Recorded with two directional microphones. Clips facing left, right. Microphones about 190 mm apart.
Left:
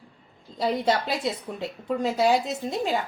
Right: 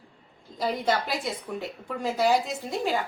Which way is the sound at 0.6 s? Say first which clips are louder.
Left 2 dB; 25° left (ahead or behind).